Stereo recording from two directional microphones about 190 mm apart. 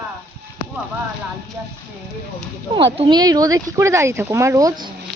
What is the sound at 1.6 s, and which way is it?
Speech, 10° right (ahead or behind).